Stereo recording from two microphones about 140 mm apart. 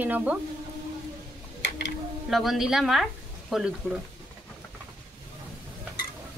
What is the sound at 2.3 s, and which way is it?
A man's voice, centre (ahead or behind).